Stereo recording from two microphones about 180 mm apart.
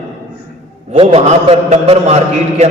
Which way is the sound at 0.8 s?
35° right (ahead or behind).